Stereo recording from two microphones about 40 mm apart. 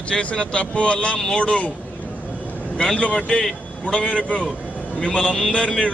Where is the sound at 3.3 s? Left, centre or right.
Centre.